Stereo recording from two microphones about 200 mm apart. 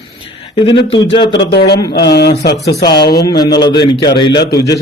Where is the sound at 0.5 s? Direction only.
25° left (ahead or behind).